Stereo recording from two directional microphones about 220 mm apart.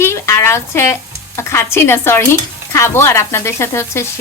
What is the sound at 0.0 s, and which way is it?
Speech, 10° left (ahead or behind).